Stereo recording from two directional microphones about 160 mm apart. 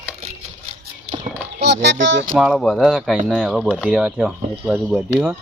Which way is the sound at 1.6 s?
90° right.